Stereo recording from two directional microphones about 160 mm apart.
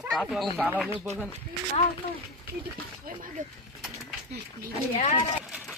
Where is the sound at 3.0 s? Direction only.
60° right (ahead or behind).